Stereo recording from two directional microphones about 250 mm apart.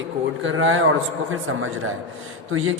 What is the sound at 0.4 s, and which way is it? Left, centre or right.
A man's voice, right.